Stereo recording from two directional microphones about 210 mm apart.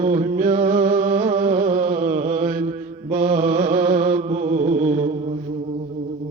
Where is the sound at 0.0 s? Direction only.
35° right (ahead or behind).